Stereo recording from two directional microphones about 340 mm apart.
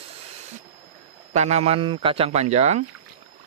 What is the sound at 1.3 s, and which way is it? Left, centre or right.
Speech, centre.